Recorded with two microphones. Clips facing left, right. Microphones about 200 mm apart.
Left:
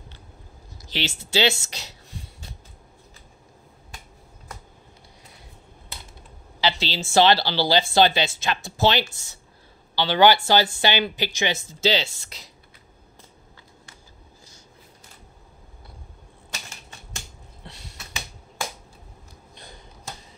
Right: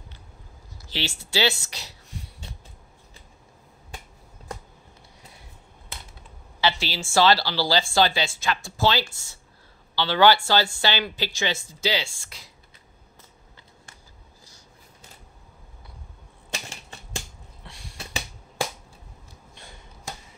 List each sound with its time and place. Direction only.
0.7 s speech: 20° left (ahead or behind)
6.6 s speech: 20° left (ahead or behind)
17.6 s finger snapping: 25° left (ahead or behind)
17.9 s finger snapping: 30° right (ahead or behind)